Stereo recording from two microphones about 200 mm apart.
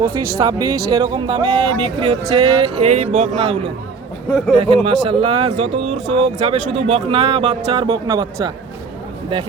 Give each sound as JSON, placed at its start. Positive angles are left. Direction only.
{"t": 0.3, "sound": "speech", "side_deg": -15}
{"t": 4.3, "sound": "speech", "side_deg": 5}
{"t": 4.5, "sound": "speech", "side_deg": -25}